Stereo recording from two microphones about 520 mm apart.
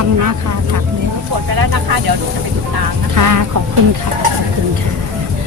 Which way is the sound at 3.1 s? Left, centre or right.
Right.